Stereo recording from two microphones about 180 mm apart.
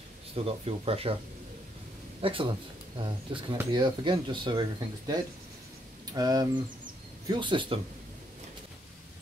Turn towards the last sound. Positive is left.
turn(degrees=-30)  # may be behind; listen again after turning